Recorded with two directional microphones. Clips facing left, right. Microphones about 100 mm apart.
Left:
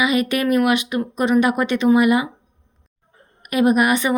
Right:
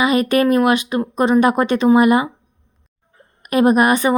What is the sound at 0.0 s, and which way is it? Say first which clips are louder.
Speech: right 4 dB; 40° right (ahead or behind).